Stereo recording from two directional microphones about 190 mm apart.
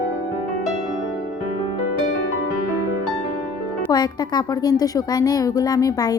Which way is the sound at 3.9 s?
20° left (ahead or behind).